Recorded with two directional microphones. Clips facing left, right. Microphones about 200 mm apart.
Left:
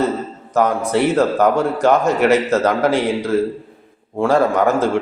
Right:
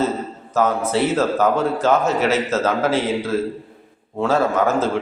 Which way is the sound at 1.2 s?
15° left (ahead or behind).